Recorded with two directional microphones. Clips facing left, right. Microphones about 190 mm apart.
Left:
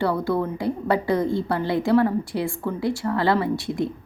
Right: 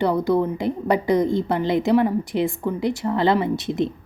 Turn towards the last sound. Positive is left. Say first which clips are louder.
# right 2 dB
turn(degrees=-20)  # may be behind; listen again after turning